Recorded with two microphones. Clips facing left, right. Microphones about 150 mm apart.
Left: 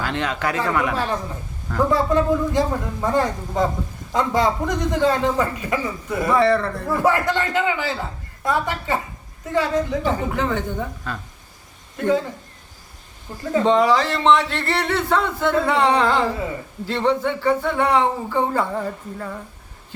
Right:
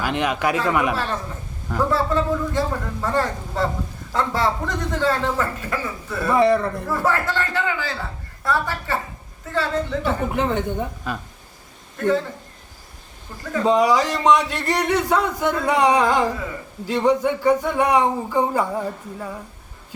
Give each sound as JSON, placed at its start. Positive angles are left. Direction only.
{"t": 0.0, "sound": "speech", "side_deg": -15}
{"t": 0.9, "sound": "a man's voice", "side_deg": 15}
{"t": 6.3, "sound": "speech", "side_deg": -15}
{"t": 6.8, "sound": "a man's voice", "side_deg": 15}
{"t": 10.3, "sound": "a woman's voice", "side_deg": -20}
{"t": 11.9, "sound": "a man's voice", "side_deg": 15}
{"t": 13.4, "sound": "a woman's voice", "side_deg": 25}
{"t": 13.7, "sound": "speech", "side_deg": -10}